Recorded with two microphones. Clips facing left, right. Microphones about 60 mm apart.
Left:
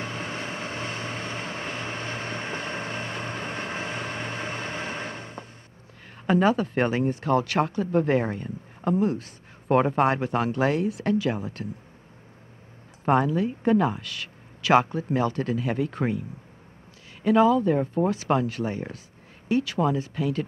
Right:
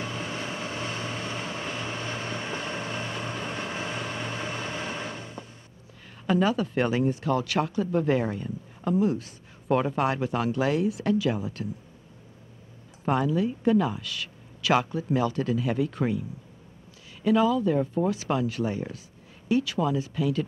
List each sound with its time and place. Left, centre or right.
0.0 s vehicle: left
6.2 s speech: left
13.0 s speech: left